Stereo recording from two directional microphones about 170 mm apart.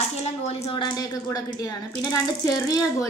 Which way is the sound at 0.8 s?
25° left (ahead or behind).